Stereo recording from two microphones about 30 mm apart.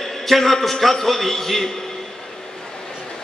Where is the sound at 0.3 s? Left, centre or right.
Centre.